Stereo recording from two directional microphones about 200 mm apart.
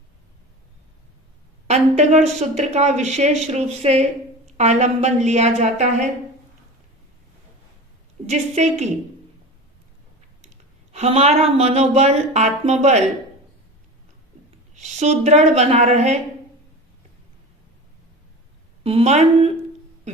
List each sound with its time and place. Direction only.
1.6 s speech: 35° right (ahead or behind)
8.3 s speech: 35° right (ahead or behind)
10.9 s speech: 30° right (ahead or behind)
14.8 s speech: 35° right (ahead or behind)
18.8 s a woman's voice: 30° right (ahead or behind)